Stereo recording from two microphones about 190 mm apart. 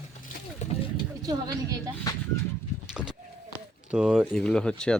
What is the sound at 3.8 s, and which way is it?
Speech, 5° right (ahead or behind).